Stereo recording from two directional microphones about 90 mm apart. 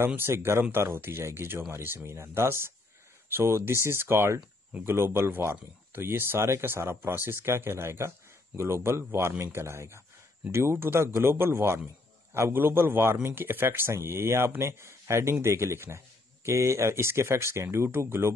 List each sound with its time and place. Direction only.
0.0 s speech: 25° right (ahead or behind)